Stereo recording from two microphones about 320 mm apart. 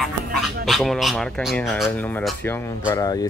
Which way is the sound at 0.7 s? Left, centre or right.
Centre.